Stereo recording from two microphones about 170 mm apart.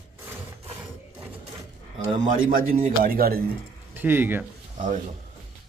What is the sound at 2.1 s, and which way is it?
Speech, 55° right (ahead or behind).